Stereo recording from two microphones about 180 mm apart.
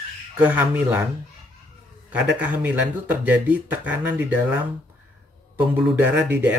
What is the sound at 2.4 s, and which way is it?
Speech, 10° right (ahead or behind).